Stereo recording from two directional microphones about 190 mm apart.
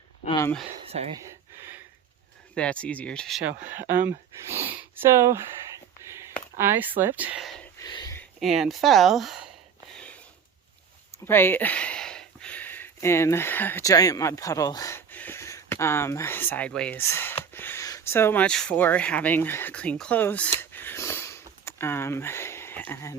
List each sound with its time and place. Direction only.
0.9 s speech: 35° right (ahead or behind)
2.6 s speech: 5° left (ahead or behind); by 5.1 s 10° right (ahead or behind)
6.0 s a sound: 15° right (ahead or behind)
6.6 s speech: 10° right (ahead or behind)
7.8 s a sound: 20° left (ahead or behind)
8.4 s speech: centre (ahead or behind)
11.3 s speech: 10° left (ahead or behind)